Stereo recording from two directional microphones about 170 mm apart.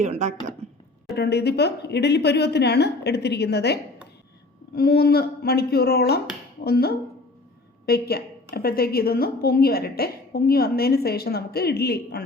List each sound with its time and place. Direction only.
0.0 s a woman's voice: 40° right (ahead or behind)
1.1 s a woman's voice: 75° left (ahead or behind)
4.7 s a woman's voice: 65° left (ahead or behind)